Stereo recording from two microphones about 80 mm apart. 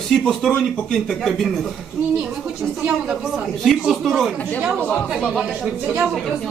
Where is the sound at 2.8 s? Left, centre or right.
Centre.